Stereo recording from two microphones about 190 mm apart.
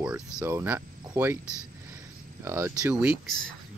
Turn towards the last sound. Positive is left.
turn(degrees=0)  # may be behind; listen again after turning